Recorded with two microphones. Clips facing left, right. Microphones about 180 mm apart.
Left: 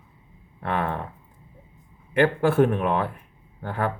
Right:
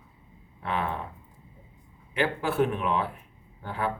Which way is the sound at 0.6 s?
55° left (ahead or behind).